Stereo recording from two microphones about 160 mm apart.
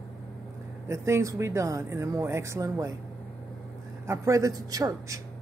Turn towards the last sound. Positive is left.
turn(degrees=-20)  # may be behind; listen again after turning